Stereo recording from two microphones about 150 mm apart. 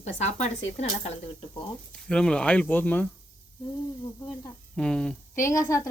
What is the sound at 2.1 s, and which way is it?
Speech, 5° left (ahead or behind).